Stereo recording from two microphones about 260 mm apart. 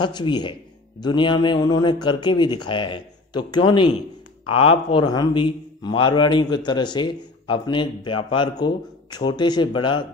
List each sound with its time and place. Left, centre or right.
0.0 s a man's voice: centre